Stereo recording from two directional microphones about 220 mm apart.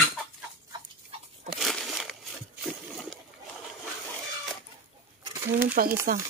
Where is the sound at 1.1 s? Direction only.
25° right (ahead or behind).